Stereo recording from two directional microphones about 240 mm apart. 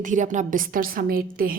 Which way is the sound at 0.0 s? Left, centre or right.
Right.